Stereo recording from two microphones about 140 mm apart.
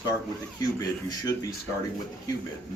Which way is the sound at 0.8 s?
25° left (ahead or behind).